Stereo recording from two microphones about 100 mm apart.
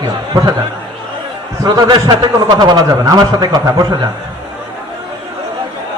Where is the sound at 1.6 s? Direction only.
45° right (ahead or behind).